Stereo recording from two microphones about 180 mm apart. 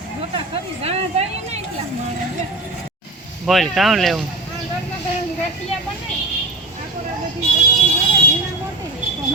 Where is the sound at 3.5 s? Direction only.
Centre (ahead or behind).